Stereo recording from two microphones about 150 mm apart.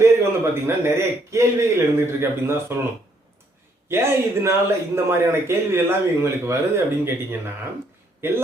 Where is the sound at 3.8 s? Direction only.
15° right (ahead or behind).